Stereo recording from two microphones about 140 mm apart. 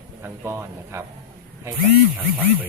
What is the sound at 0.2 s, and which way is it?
Speech, 20° right (ahead or behind).